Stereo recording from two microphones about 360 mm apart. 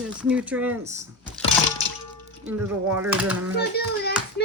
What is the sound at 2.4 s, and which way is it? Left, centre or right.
Speech, centre.